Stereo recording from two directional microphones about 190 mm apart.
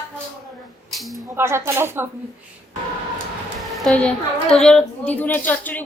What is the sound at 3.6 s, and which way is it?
A woman's voice, centre (ahead or behind).